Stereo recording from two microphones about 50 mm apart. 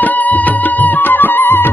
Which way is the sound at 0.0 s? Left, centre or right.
Left.